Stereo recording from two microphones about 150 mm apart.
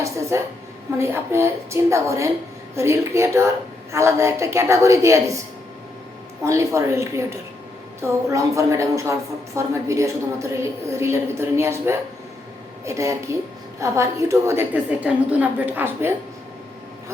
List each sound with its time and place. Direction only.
0.0 s a woman's voice: 20° right (ahead or behind)
6.4 s a woman's voice: 20° right (ahead or behind)